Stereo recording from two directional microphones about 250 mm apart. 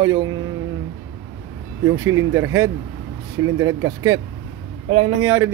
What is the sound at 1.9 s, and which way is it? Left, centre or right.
Speech, right.